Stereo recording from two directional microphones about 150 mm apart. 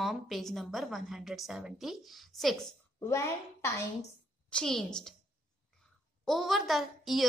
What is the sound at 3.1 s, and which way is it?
Speech, 20° left (ahead or behind).